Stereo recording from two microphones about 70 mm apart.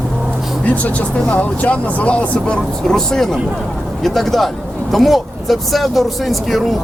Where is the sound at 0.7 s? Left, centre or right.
Left.